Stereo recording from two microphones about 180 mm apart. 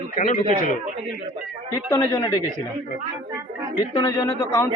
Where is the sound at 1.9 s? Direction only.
15° left (ahead or behind).